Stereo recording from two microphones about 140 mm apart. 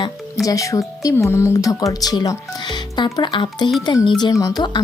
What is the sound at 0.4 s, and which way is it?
Speech, 25° left (ahead or behind).